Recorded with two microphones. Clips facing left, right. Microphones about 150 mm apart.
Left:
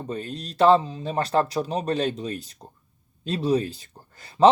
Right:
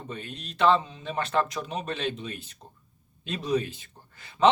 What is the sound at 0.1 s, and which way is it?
Speech, 35° left (ahead or behind).